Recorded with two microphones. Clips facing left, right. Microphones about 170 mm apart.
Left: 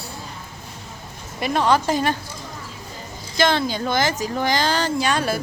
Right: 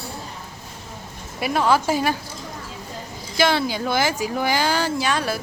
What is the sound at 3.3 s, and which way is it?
Speech, 5° right (ahead or behind).